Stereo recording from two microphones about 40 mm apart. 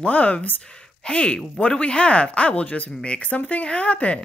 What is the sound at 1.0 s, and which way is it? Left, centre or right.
Speech, left.